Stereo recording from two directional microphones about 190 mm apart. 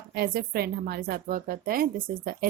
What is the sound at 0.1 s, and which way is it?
A woman's voice, 55° right (ahead or behind).